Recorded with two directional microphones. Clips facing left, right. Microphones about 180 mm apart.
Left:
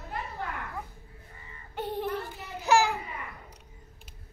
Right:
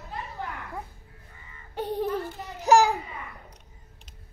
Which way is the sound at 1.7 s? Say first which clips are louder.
Right 4 dB; 40° right (ahead or behind).